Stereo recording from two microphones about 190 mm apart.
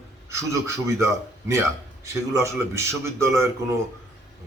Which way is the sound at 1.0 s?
15° right (ahead or behind).